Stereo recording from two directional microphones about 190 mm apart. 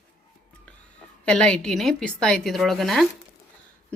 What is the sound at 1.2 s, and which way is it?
A woman's voice, 5° left (ahead or behind).